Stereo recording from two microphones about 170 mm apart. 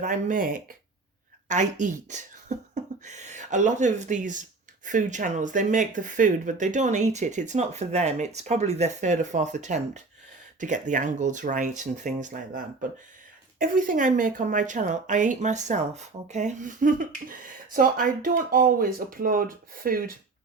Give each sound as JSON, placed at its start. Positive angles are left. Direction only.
{"t": 0.0, "sound": "a woman's voice", "side_deg": -50}